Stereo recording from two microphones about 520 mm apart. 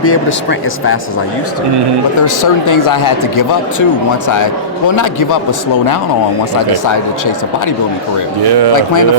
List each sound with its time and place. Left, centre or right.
0.0 s speech: left
2.1 s speech: left
4.9 s speech: left
8.7 s speech: left